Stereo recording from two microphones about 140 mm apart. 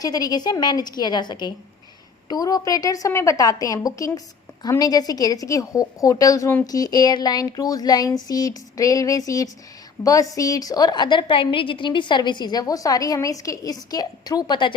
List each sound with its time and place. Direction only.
0.0 s a woman's voice: 25° left (ahead or behind)